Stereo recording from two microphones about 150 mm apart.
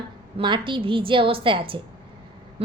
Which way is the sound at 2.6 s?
40° right (ahead or behind).